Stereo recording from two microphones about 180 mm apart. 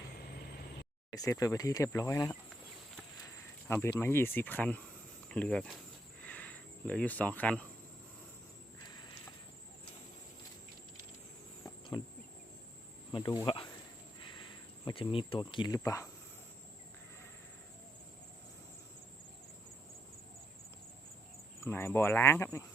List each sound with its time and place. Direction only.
0.3 s vehicle: 55° left (ahead or behind)
1.1 s speech: 20° left (ahead or behind)
3.7 s speech: 15° left (ahead or behind)
6.2 s cricket: 10° left (ahead or behind)
11.9 s insect: 20° left (ahead or behind)
13.1 s speech: 30° left (ahead or behind)
14.8 s speech: 30° left (ahead or behind)
21.6 s speech: 15° left (ahead or behind)